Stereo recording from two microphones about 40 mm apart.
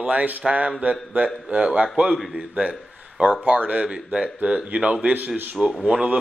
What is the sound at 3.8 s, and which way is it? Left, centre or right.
Speech, right.